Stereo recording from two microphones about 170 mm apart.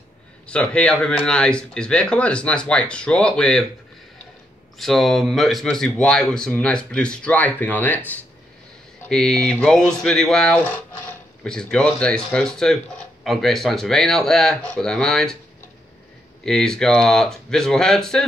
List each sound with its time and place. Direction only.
0.5 s speech: 5° left (ahead or behind)
4.7 s speech: centre (ahead or behind)
16.4 s speech: 5° left (ahead or behind)